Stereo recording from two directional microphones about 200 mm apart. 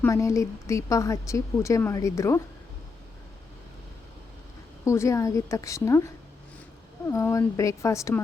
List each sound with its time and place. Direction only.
0.0 s speech: 15° left (ahead or behind)
4.9 s speech: 15° left (ahead or behind)
7.1 s speech: 15° left (ahead or behind)